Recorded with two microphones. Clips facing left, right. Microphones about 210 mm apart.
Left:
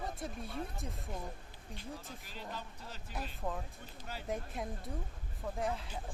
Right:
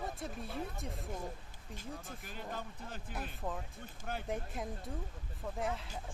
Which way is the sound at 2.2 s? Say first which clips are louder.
Right 3 dB; 50° right (ahead or behind).